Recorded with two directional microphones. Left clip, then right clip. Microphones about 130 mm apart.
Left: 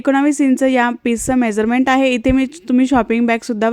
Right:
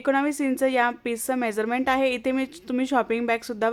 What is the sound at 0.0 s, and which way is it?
Speech, 45° left (ahead or behind).